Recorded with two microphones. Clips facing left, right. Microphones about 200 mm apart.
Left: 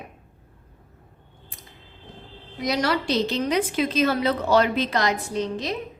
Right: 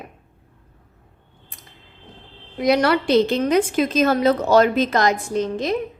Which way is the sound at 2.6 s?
60° right (ahead or behind).